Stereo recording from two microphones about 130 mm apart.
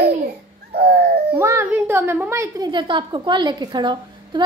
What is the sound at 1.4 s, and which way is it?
A woman's voice, 20° right (ahead or behind).